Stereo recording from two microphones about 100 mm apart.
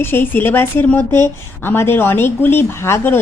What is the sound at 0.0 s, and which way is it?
A woman's voice, 20° left (ahead or behind).